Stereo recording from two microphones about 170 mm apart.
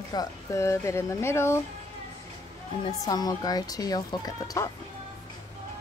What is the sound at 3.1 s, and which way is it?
Speech, 20° left (ahead or behind).